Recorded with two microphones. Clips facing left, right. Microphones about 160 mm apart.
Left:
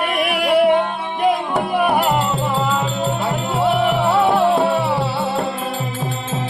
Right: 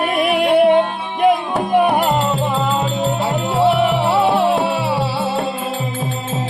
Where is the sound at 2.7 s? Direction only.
25° right (ahead or behind).